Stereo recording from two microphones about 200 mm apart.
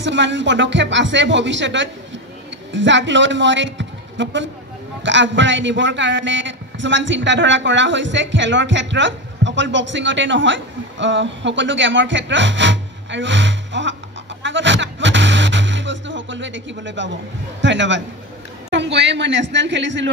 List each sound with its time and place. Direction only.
0.0 s a man's voice: 65° right (ahead or behind)
14.4 s music: 65° right (ahead or behind)
17.6 s a man's voice: 65° right (ahead or behind)